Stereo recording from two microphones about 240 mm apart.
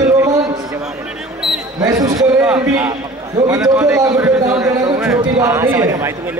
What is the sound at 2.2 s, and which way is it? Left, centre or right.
A man's voice, centre.